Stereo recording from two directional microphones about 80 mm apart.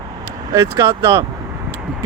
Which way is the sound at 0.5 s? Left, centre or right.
Right.